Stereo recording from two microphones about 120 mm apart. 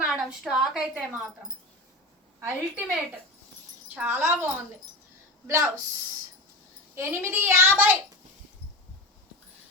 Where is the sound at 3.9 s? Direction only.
10° right (ahead or behind).